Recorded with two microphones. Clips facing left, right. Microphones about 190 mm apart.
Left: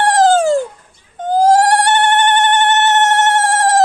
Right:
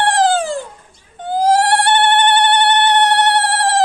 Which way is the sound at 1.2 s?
45° left (ahead or behind).